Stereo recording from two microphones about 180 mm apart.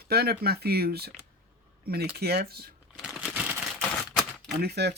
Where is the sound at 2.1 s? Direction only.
60° right (ahead or behind).